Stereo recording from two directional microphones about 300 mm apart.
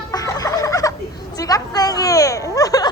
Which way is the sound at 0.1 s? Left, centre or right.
Centre.